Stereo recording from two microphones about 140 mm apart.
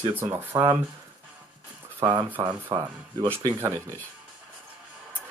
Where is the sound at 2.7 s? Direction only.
20° right (ahead or behind).